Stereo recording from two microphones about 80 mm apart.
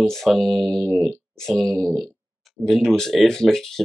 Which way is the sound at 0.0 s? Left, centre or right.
Centre.